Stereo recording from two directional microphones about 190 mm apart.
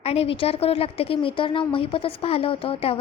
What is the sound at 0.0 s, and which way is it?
A woman's voice, 30° left (ahead or behind).